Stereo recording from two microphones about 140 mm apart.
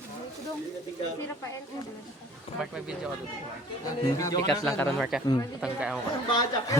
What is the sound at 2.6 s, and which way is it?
Speech, 5° right (ahead or behind).